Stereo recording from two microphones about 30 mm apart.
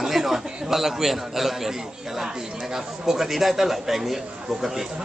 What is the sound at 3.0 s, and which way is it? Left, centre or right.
Speech, centre.